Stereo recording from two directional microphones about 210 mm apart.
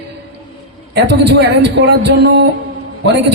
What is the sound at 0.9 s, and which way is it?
A man's voice, 55° right (ahead or behind).